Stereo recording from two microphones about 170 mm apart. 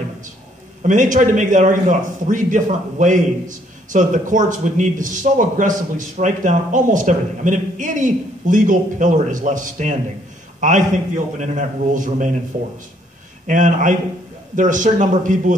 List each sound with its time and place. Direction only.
0.8 s a man's voice: 50° right (ahead or behind)
13.5 s a man's voice: 45° right (ahead or behind)